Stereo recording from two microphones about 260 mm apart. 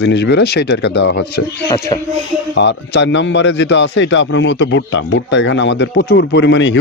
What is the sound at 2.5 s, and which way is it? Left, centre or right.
A man's voice, left.